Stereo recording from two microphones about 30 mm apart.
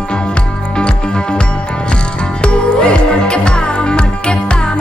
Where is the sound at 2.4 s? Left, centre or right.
Left.